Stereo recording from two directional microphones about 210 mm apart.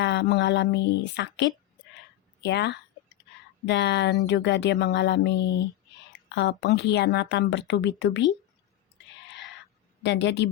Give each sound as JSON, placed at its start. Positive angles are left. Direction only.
{"t": 0.0, "sound": "a woman's voice", "side_deg": 55}
{"t": 10.0, "sound": "a woman's voice", "side_deg": 55}